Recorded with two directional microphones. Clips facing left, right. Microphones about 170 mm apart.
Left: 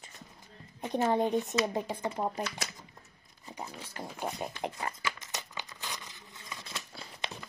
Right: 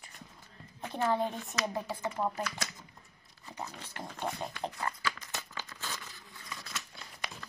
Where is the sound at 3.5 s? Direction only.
10° left (ahead or behind); by 7.4 s 25° left (ahead or behind).